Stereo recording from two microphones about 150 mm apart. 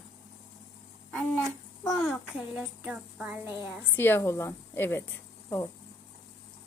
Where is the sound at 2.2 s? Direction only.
5° right (ahead or behind).